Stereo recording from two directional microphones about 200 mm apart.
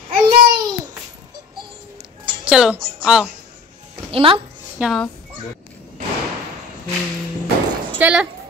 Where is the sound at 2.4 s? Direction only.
5° right (ahead or behind).